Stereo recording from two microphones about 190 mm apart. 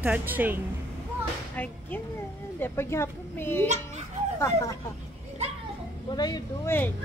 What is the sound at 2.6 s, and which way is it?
A woman's voice, 15° left (ahead or behind).